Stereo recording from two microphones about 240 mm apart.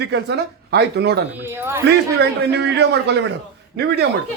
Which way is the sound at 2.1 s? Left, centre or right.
Right.